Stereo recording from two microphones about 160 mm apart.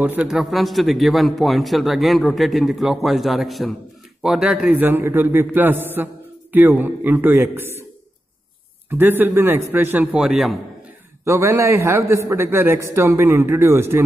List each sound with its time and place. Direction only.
0.0 s a man's voice: 10° right (ahead or behind)
8.8 s a man's voice: 15° right (ahead or behind)
11.2 s a man's voice: 15° right (ahead or behind)